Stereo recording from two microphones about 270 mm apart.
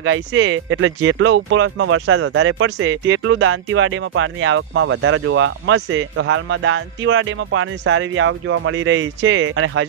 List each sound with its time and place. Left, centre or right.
0.0 s speech: right